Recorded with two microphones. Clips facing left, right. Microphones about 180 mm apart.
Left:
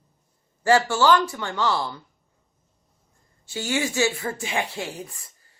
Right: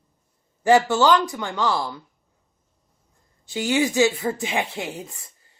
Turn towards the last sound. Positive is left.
turn(degrees=-20)  # may be behind; listen again after turning